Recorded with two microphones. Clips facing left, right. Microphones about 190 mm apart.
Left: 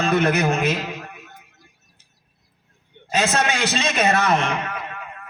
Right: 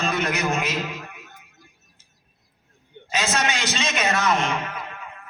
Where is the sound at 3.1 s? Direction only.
60° left (ahead or behind).